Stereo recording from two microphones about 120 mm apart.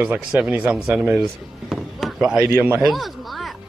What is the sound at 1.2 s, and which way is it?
Chop, centre (ahead or behind).